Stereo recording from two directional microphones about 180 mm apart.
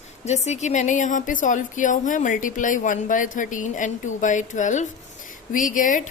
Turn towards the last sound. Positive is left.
turn(degrees=45)  # may be behind; listen again after turning